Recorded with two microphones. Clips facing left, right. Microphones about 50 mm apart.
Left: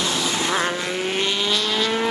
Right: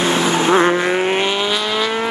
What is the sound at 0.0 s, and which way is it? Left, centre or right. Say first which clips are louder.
Vehicle: right 8 dB; right.